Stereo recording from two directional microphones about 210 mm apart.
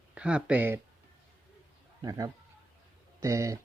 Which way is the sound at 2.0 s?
15° right (ahead or behind).